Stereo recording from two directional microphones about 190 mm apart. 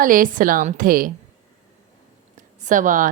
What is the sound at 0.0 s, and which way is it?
A woman's voice, 45° right (ahead or behind).